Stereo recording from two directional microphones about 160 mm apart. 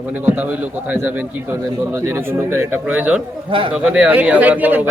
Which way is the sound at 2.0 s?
15° right (ahead or behind).